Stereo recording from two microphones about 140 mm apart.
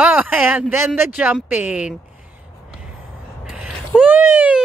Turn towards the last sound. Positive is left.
turn(degrees=-15)  # may be behind; listen again after turning